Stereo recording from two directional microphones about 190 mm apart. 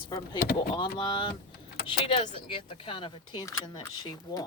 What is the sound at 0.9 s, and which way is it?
Speech, 25° left (ahead or behind).